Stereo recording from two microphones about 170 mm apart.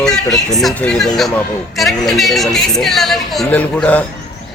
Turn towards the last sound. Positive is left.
turn(degrees=10)  # may be behind; listen again after turning